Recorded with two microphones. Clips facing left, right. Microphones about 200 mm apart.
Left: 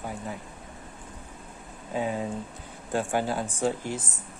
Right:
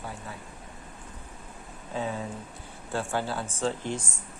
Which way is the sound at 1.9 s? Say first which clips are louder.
Left 3 dB; 15° left (ahead or behind).